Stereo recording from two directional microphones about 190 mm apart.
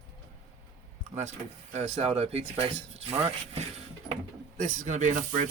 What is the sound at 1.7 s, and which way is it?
Speech, 35° right (ahead or behind).